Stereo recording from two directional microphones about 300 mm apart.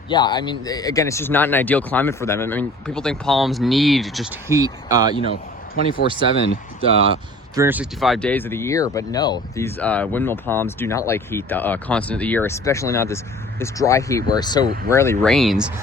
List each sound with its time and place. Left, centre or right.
0.1 s speech: centre
5.7 s a man's voice: left
7.5 s speech: centre